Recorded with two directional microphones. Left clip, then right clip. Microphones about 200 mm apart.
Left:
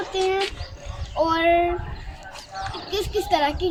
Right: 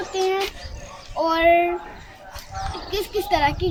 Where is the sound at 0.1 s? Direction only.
5° right (ahead or behind).